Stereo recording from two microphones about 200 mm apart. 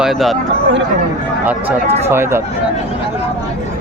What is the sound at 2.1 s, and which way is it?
Speech, 10° right (ahead or behind).